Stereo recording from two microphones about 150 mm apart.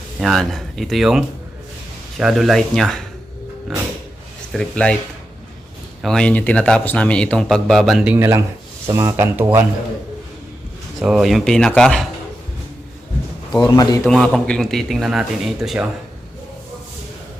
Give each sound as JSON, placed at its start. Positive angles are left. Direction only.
{"t": 0.2, "sound": "speech", "side_deg": 0}
{"t": 4.5, "sound": "speech", "side_deg": 5}
{"t": 6.0, "sound": "speech", "side_deg": 5}
{"t": 11.0, "sound": "speech", "side_deg": 0}
{"t": 13.6, "sound": "a man's voice", "side_deg": 25}
{"t": 14.1, "sound": "speech", "side_deg": 0}